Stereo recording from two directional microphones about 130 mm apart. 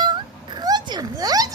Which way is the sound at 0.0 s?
35° right (ahead or behind).